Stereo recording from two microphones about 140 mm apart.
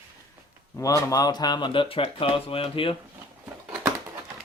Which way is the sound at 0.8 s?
25° left (ahead or behind).